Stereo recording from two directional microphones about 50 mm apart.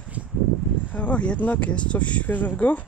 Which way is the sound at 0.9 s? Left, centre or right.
Left.